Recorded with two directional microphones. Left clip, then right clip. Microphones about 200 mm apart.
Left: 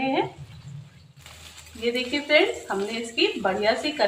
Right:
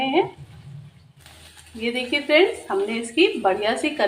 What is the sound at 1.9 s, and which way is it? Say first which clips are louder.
Speech: right 3 dB; 30° right (ahead or behind).